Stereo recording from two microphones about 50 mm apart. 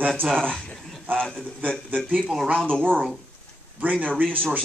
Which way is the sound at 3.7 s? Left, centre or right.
Right.